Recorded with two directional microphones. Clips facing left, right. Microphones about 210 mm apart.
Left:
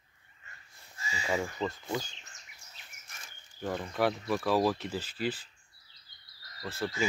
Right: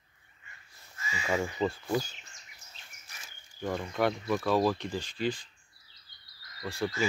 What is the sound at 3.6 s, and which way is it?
Speech, 5° left (ahead or behind).